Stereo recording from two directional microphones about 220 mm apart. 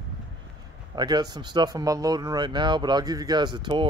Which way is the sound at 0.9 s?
20° right (ahead or behind).